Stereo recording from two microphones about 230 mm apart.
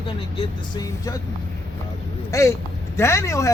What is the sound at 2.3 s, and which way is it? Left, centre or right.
Speech, centre.